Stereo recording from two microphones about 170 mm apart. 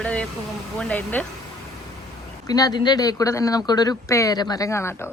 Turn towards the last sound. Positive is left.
turn(degrees=15)  # may be behind; listen again after turning